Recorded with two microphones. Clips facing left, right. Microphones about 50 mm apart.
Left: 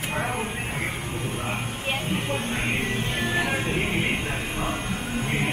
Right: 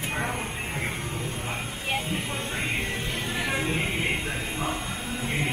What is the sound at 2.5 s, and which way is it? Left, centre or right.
Music, left.